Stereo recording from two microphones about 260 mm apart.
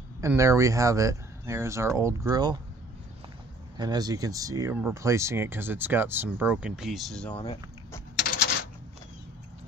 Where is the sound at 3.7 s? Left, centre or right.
Centre.